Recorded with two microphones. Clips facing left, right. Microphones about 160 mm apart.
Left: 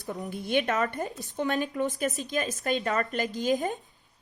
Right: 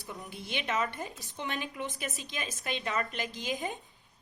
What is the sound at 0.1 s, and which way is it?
A woman's voice, 45° left (ahead or behind).